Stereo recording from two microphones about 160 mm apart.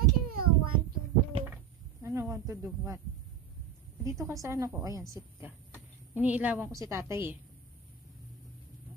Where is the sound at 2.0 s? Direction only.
20° right (ahead or behind).